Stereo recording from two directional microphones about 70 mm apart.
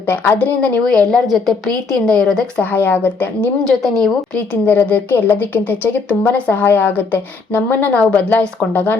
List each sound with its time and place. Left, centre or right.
0.1 s a woman's voice: left
0.9 s a woman's voice: centre
2.7 s a woman's voice: left
3.6 s a woman's voice: centre
4.6 s a woman's voice: left